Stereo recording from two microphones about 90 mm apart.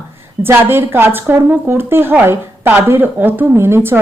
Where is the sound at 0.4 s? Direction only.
25° right (ahead or behind).